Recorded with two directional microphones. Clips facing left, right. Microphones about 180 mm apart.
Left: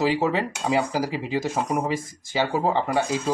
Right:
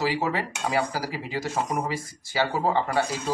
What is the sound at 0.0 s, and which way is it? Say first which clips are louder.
Speech: left 4 dB; 20° left (ahead or behind).